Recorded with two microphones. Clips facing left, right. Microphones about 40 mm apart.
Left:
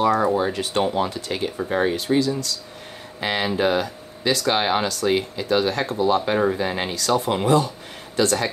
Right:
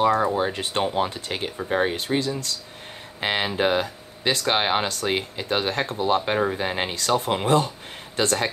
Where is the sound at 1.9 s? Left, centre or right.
Right.